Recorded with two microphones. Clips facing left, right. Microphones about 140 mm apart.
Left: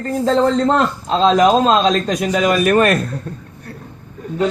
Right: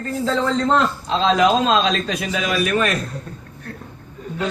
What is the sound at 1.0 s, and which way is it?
A man's voice, 40° left (ahead or behind).